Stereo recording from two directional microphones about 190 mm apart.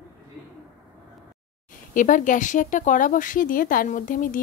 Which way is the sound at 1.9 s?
45° left (ahead or behind).